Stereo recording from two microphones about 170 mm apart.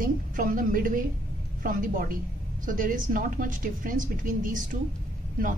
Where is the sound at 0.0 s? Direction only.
55° right (ahead or behind).